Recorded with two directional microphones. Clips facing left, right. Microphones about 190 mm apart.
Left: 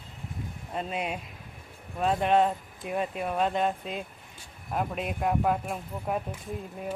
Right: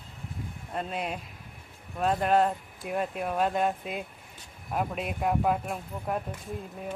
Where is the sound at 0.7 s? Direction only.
Centre (ahead or behind).